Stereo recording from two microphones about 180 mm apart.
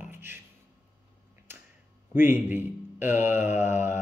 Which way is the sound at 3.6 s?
45° left (ahead or behind).